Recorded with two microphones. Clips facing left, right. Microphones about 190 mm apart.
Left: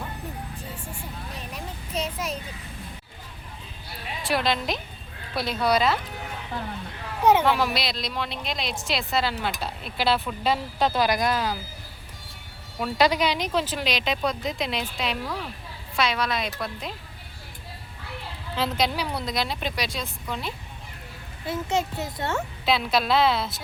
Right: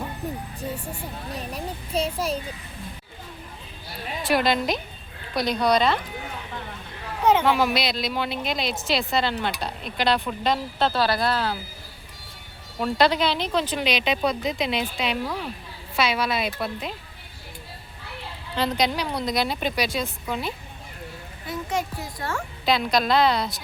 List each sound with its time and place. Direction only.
1.4 s a child's voice: 35° right (ahead or behind)
4.2 s a woman's voice: centre (ahead or behind)
7.4 s speech: centre (ahead or behind); by 11.5 s 15° left (ahead or behind)
12.8 s speech: 10° left (ahead or behind); by 16.9 s 5° right (ahead or behind)
18.5 s speech: 5° left (ahead or behind)
21.4 s a child's voice: 25° left (ahead or behind)
22.6 s speech: centre (ahead or behind)